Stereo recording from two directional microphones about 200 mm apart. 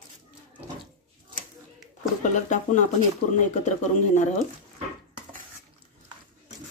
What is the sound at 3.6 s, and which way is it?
Speech, 35° left (ahead or behind).